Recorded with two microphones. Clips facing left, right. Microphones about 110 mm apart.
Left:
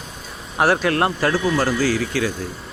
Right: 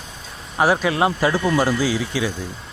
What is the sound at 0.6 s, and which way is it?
Speech, 5° right (ahead or behind).